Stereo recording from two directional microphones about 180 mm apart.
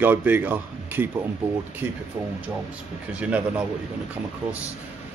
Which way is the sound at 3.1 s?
5° right (ahead or behind).